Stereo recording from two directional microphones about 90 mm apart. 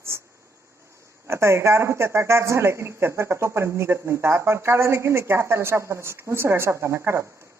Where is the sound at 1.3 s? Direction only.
30° right (ahead or behind).